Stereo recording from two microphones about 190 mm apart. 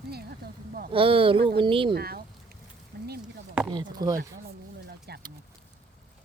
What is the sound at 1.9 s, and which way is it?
Speech, 55° right (ahead or behind).